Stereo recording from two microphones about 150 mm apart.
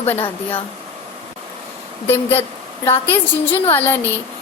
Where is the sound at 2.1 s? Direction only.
15° left (ahead or behind).